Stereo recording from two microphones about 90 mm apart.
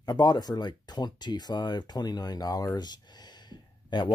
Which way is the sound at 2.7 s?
50° left (ahead or behind).